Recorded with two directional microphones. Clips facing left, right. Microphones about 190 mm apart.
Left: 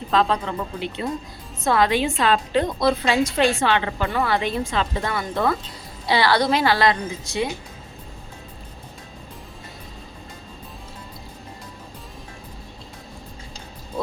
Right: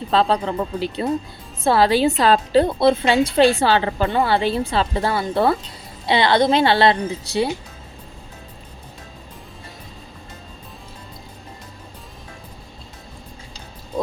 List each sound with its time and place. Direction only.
0.1 s a woman's voice: 35° right (ahead or behind)